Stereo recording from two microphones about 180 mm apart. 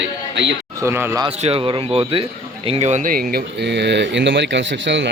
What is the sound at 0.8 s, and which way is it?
Speech, 15° right (ahead or behind).